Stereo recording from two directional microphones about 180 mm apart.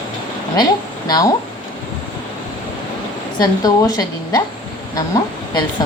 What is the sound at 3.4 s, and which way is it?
A woman's voice, 20° left (ahead or behind).